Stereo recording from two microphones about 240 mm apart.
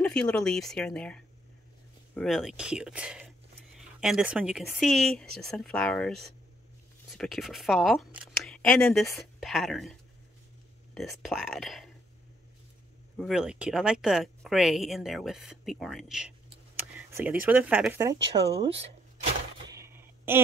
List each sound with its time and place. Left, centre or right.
0.0 s speech: centre
11.2 s speech: centre
13.2 s speech: centre
18.5 s speech: right
19.7 s a sound: centre